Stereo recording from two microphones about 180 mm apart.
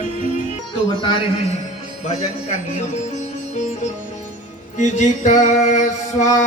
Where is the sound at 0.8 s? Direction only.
25° left (ahead or behind).